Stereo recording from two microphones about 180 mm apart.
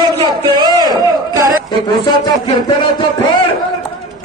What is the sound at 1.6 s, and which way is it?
A man's voice, 25° left (ahead or behind).